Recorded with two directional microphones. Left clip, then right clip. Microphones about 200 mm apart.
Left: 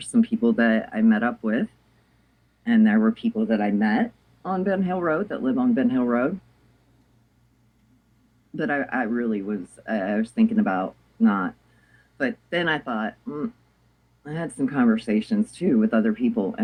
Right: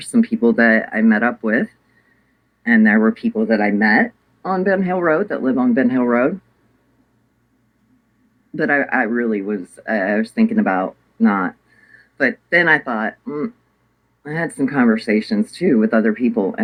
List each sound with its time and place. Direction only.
0.0 s speech: 25° right (ahead or behind)
8.5 s speech: 25° right (ahead or behind)